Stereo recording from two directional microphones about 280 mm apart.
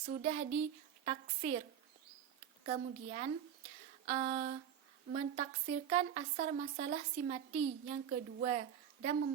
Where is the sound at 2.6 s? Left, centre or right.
Right.